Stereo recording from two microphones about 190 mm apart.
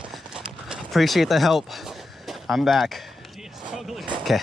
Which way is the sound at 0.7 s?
Centre (ahead or behind).